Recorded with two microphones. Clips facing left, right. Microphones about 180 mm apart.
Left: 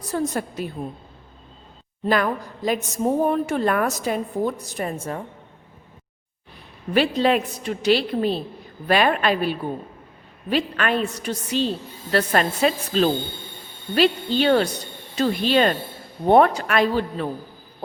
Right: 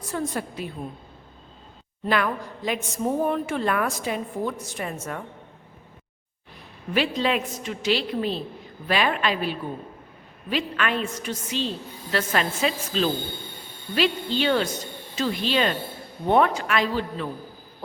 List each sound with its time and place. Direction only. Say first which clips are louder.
0.0 s speech: left 4 dB; 40° left (ahead or behind)
2.0 s a woman's voice: left 3 dB; 40° left (ahead or behind)
7.2 s a woman's voice: left 5 dB; 45° left (ahead or behind)
14.7 s a sound: right 1 dB; 65° left (ahead or behind)
15.2 s speech: left 5 dB; 45° left (ahead or behind)